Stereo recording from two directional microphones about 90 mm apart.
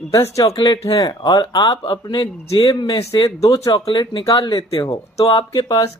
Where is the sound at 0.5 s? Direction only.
55° left (ahead or behind).